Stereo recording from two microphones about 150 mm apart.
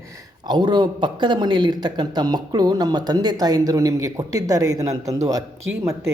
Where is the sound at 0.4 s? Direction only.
30° right (ahead or behind).